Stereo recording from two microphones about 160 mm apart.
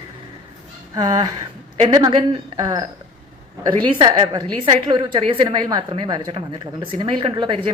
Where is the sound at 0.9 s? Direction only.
25° right (ahead or behind).